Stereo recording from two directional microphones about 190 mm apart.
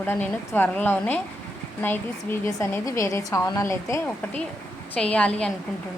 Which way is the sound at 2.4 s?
15° left (ahead or behind).